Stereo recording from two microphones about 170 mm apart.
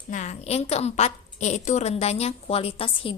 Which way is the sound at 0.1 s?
45° left (ahead or behind).